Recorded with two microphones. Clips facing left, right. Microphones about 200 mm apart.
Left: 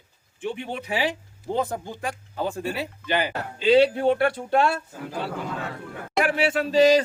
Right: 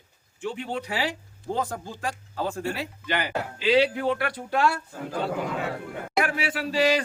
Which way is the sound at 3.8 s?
30° left (ahead or behind).